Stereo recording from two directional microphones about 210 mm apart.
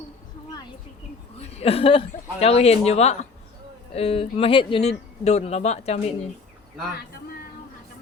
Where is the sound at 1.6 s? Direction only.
25° left (ahead or behind).